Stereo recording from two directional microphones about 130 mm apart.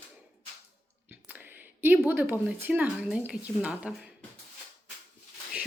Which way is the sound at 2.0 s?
15° right (ahead or behind).